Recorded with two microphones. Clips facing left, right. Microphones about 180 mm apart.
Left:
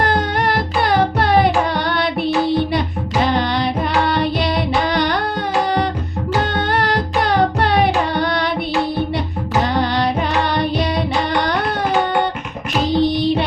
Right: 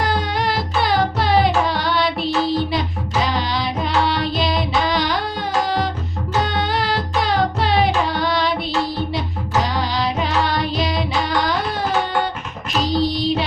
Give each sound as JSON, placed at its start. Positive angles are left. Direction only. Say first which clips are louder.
{"t": 0.0, "sound": "carnatic music", "louder": "left 3 dB", "side_deg": 60}
{"t": 4.0, "sound": "music", "louder": "left 2 dB", "side_deg": 60}
{"t": 4.9, "sound": "a sound", "louder": "left 2 dB", "side_deg": 55}
{"t": 6.5, "sound": "carnatic music", "louder": "left 3 dB", "side_deg": 55}
{"t": 9.7, "sound": "carnatic music", "louder": "left 4 dB", "side_deg": 60}
{"t": 13.0, "sound": "music", "louder": "left 5 dB", "side_deg": 55}